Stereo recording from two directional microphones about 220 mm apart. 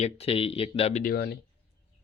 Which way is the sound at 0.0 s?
25° left (ahead or behind).